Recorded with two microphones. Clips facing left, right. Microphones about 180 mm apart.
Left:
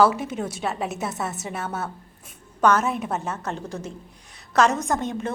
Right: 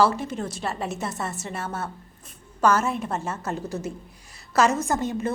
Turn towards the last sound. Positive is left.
turn(degrees=-5)  # may be behind; listen again after turning